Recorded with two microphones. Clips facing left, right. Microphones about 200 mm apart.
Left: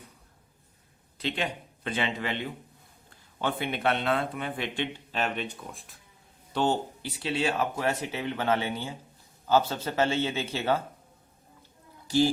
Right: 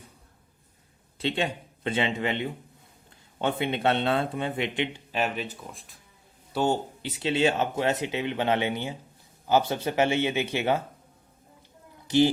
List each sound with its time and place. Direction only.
1.2 s speech: 25° right (ahead or behind); by 6.7 s 10° right (ahead or behind)
7.0 s speech: 25° right (ahead or behind)
12.0 s speech: 20° right (ahead or behind)